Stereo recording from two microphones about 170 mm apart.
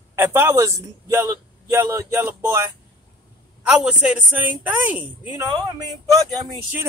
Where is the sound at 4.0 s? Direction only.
5° right (ahead or behind).